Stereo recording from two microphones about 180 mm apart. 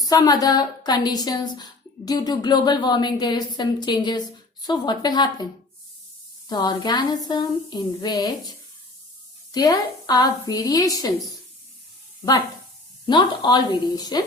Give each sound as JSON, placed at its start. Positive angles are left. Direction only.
{"t": 0.0, "sound": "a woman's voice", "side_deg": 20}
{"t": 6.5, "sound": "a woman's voice", "side_deg": 25}
{"t": 9.5, "sound": "a woman's voice", "side_deg": 20}
{"t": 13.1, "sound": "a woman's voice", "side_deg": 25}